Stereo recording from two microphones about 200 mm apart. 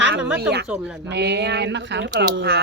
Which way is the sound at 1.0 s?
55° right (ahead or behind).